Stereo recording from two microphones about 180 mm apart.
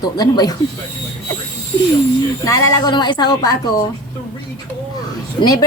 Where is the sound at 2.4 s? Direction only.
15° left (ahead or behind).